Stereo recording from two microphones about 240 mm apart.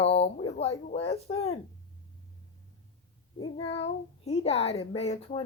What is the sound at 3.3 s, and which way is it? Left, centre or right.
Speech, centre.